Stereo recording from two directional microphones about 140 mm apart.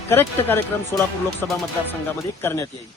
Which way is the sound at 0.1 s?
15° left (ahead or behind).